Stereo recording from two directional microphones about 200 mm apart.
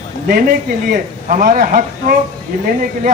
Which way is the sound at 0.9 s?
45° right (ahead or behind).